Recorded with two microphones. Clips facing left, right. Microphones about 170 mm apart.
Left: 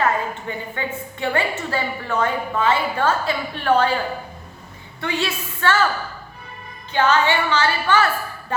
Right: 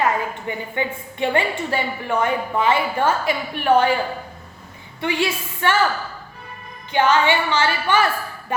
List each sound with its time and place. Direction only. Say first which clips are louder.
0.0 s a woman's voice: even; 15° right (ahead or behind)
4.9 s a woman's voice: right 2 dB; 15° right (ahead or behind)
6.9 s a woman's voice: right 1 dB; 15° right (ahead or behind)